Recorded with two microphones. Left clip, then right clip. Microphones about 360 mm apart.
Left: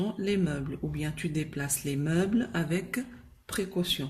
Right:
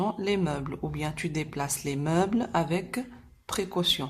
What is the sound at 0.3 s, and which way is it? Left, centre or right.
A woman's voice, centre.